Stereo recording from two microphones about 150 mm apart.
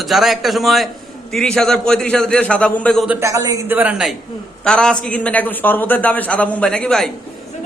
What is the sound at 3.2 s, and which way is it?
Speech, 20° right (ahead or behind).